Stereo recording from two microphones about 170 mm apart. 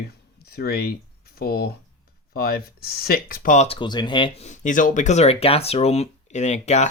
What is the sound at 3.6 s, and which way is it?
Speech, 30° left (ahead or behind).